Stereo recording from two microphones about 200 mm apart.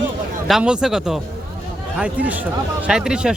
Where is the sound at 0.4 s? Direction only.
5° right (ahead or behind).